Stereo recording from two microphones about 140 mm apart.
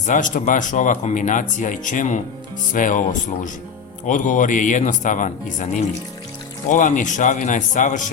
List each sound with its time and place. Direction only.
0.0 s speech: 65° left (ahead or behind)